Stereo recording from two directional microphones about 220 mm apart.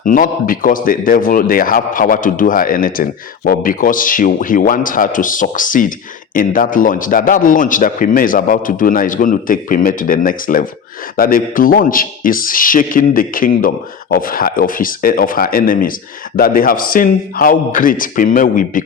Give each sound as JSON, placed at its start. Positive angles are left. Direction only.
{"t": 0.0, "sound": "a man's voice", "side_deg": 40}